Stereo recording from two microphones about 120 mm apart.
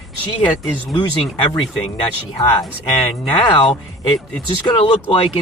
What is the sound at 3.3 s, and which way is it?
Speech, 45° left (ahead or behind).